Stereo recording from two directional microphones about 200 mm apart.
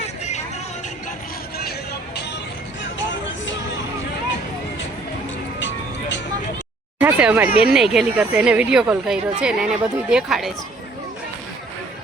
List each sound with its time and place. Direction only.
5.5 s music: 65° left (ahead or behind)
7.0 s speech: 5° right (ahead or behind)